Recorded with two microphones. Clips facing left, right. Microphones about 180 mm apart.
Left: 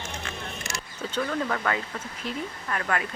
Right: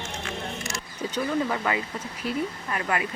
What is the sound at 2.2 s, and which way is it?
Speech, 10° right (ahead or behind).